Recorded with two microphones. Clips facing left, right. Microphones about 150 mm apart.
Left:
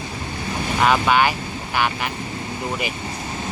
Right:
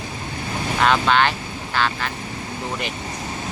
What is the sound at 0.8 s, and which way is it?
Speech, 10° left (ahead or behind).